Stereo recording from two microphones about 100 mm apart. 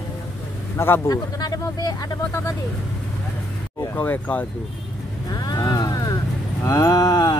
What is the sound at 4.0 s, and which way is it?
Speech, 15° left (ahead or behind).